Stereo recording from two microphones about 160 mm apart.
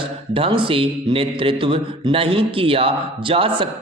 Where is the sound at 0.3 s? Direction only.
35° right (ahead or behind).